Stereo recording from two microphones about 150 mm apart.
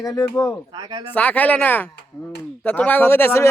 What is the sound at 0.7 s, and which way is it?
Speech, 30° right (ahead or behind).